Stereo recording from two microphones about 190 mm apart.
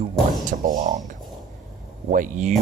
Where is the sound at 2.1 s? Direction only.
40° right (ahead or behind).